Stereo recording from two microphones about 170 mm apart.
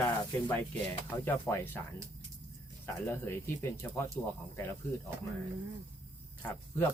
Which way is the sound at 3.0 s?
15° left (ahead or behind).